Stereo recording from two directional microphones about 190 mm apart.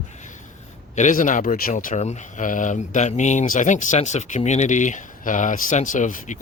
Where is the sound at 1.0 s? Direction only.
45° left (ahead or behind).